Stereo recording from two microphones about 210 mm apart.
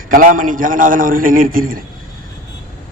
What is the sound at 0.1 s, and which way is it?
A man's voice, 40° right (ahead or behind).